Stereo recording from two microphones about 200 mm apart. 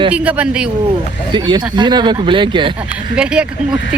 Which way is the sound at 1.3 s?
20° right (ahead or behind).